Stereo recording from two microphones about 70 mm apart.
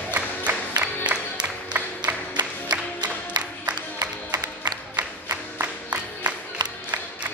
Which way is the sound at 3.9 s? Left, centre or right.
Right.